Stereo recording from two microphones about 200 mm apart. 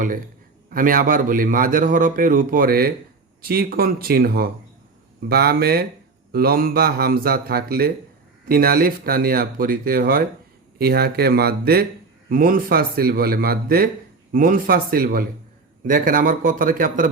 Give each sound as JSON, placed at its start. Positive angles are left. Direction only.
{"t": 0.7, "sound": "a man's voice", "side_deg": -45}